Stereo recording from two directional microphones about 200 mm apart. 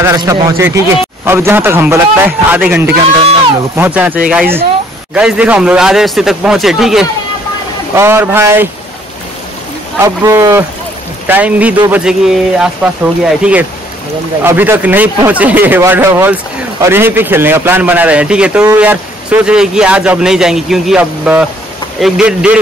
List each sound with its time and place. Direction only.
0.0 s a man's voice: 15° right (ahead or behind)
7.9 s a man's voice: 10° right (ahead or behind)
9.9 s a man's voice: 15° right (ahead or behind)